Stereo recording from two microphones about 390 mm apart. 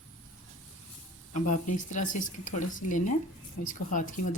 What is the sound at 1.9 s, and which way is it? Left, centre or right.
Speech, centre.